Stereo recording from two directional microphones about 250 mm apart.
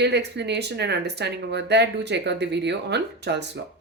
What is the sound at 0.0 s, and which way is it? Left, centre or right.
Speech, right.